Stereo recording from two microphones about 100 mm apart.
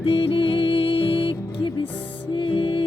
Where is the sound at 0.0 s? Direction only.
70° left (ahead or behind).